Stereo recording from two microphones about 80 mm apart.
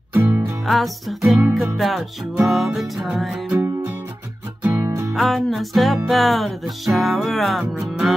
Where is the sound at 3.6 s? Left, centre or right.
Right.